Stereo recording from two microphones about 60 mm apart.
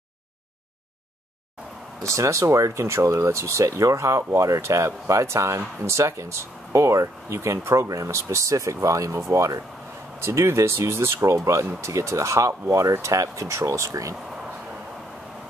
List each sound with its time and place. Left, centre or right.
2.0 s speech: right
10.2 s speech: right
11.3 s speech: right